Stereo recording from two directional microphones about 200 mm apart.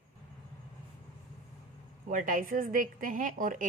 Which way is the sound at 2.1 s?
40° right (ahead or behind).